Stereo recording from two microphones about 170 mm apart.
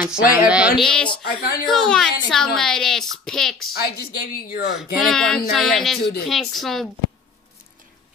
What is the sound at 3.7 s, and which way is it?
Speech, 65° left (ahead or behind).